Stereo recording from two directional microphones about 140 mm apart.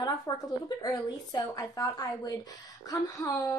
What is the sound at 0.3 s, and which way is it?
A woman's voice, 25° left (ahead or behind).